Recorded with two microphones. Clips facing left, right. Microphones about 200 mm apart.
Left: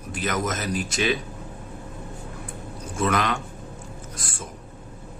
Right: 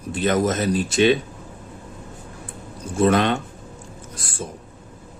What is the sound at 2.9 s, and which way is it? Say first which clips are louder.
Speech: right 6 dB; 30° right (ahead or behind).